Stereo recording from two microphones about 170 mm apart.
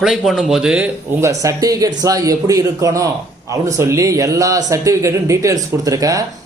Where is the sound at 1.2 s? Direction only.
20° right (ahead or behind).